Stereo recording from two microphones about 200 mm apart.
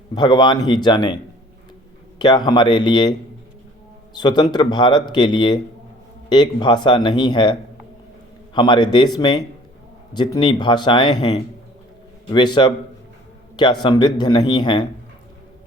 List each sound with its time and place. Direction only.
0.1 s speech: 20° left (ahead or behind)
8.5 s speech: 25° left (ahead or behind)